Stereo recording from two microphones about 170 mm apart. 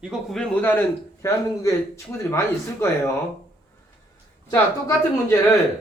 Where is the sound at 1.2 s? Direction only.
15° left (ahead or behind).